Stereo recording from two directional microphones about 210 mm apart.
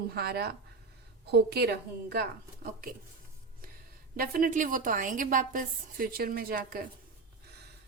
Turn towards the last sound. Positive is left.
turn(degrees=-45)  # may be behind; listen again after turning